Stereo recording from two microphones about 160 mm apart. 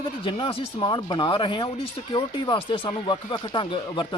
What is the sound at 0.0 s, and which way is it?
Speech, 30° left (ahead or behind).